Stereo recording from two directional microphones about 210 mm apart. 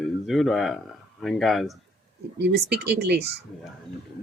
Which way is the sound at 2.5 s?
50° right (ahead or behind).